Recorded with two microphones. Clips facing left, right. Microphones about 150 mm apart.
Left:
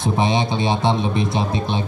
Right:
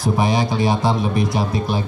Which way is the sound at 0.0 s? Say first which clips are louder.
Right 1 dB; 25° left (ahead or behind).